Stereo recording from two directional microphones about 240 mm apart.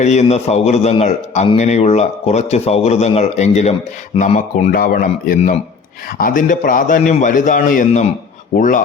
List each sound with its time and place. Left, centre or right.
0.0 s a man's voice: left